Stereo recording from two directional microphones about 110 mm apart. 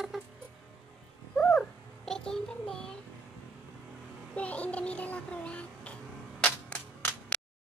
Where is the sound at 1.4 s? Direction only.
10° left (ahead or behind).